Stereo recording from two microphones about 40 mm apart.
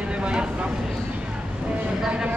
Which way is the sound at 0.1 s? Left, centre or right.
Right.